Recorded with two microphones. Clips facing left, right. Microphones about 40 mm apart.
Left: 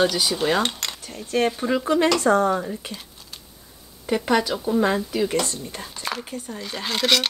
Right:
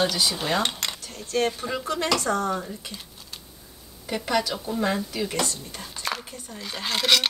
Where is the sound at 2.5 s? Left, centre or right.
Centre.